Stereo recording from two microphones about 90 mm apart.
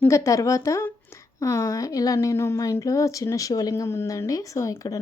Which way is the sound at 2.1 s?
30° left (ahead or behind).